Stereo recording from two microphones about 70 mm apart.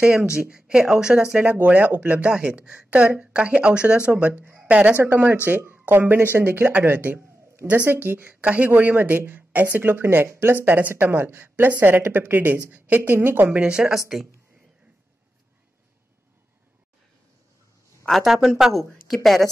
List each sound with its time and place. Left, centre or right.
0.0 s speech: centre
4.6 s a sound: centre
4.9 s speech: right; by 14.2 s centre
18.2 s speech: centre